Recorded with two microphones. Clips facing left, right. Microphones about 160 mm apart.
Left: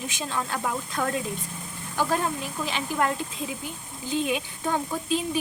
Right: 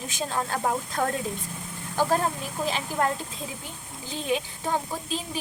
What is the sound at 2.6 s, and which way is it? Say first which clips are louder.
Speech: even; 35° right (ahead or behind).